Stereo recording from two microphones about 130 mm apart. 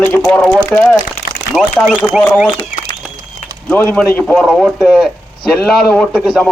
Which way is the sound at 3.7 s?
15° left (ahead or behind).